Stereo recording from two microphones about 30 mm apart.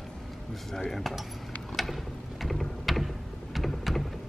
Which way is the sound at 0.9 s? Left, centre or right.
Centre.